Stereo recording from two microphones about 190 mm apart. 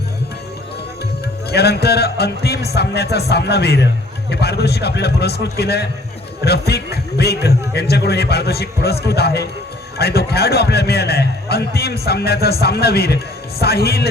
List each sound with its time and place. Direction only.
1.5 s a man's voice: 60° left (ahead or behind)